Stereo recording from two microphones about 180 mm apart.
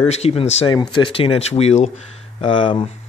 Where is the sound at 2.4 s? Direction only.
25° left (ahead or behind).